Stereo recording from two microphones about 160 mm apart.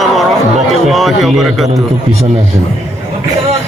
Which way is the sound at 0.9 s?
Centre (ahead or behind).